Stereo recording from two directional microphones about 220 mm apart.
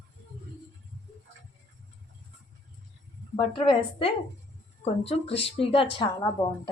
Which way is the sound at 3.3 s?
20° left (ahead or behind).